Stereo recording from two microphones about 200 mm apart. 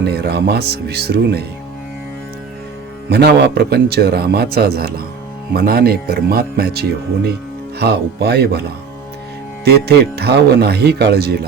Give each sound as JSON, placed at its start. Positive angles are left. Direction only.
{"t": 0.0, "sound": "a man's voice", "side_deg": -55}
{"t": 3.1, "sound": "a man's voice", "side_deg": -55}
{"t": 9.6, "sound": "a man's voice", "side_deg": -50}